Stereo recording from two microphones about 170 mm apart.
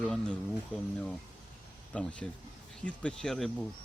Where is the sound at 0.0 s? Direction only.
5° left (ahead or behind).